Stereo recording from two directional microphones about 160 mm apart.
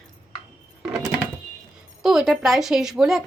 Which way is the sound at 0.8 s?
5° right (ahead or behind).